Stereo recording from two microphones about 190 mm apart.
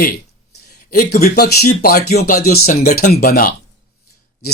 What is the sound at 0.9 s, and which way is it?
Speech, 50° left (ahead or behind).